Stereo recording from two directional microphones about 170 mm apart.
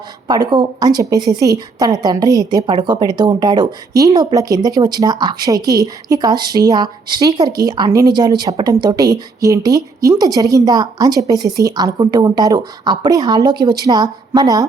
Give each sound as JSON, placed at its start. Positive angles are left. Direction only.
{"t": 0.3, "sound": "a woman's voice", "side_deg": -25}